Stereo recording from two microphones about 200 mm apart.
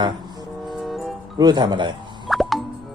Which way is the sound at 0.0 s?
20° right (ahead or behind).